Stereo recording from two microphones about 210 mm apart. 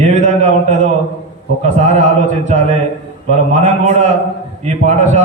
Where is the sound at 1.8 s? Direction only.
35° right (ahead or behind).